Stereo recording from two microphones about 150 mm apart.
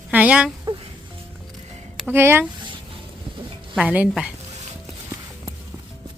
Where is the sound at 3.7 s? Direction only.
5° right (ahead or behind).